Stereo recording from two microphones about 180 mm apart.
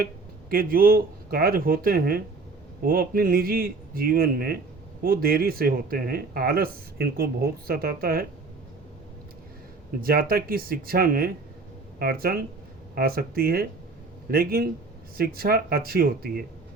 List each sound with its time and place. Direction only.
0.5 s speech: 55° right (ahead or behind)
10.0 s speech: 55° right (ahead or behind)